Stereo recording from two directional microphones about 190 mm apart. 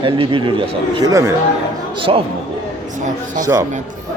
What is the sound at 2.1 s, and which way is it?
Speech, 30° right (ahead or behind).